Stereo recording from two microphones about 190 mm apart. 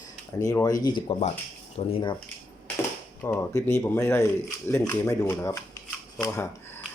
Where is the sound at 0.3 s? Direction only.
15° left (ahead or behind).